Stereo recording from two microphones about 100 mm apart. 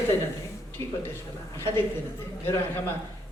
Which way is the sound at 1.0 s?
25° left (ahead or behind).